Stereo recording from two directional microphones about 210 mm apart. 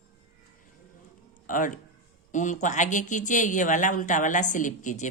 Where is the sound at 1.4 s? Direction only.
40° left (ahead or behind).